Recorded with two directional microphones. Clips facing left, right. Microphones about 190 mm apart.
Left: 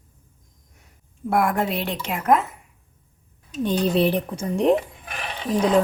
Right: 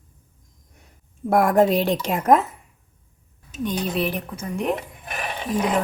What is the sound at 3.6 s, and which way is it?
A woman's voice, 30° left (ahead or behind).